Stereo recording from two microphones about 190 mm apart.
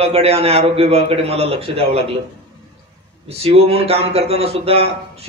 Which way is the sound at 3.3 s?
30° right (ahead or behind).